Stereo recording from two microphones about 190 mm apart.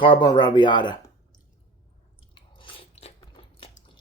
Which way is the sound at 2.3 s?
25° left (ahead or behind).